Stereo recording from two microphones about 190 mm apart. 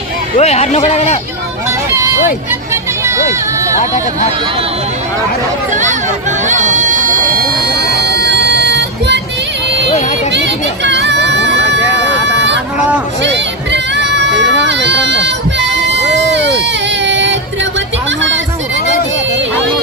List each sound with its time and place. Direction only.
0.3 s speech: 35° left (ahead or behind)
5.7 s speech: 40° right (ahead or behind)
6.4 s music: 40° right (ahead or behind); by 9.2 s 65° right (ahead or behind)
10.3 s hubbub: 70° right (ahead or behind)
13.2 s music: 70° right (ahead or behind)